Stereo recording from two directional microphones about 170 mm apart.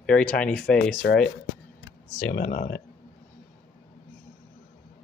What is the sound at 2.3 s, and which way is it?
Speech, 55° left (ahead or behind).